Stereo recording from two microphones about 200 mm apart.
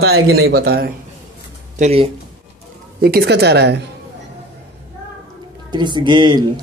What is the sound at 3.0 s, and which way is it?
Speech, 55° right (ahead or behind).